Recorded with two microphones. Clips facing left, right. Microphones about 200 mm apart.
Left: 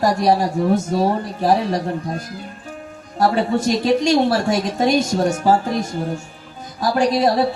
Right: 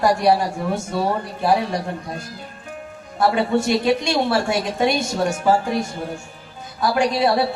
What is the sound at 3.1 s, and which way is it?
Speech, 40° left (ahead or behind).